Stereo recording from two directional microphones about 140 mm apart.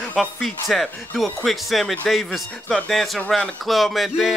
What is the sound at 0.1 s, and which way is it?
Speech, centre (ahead or behind).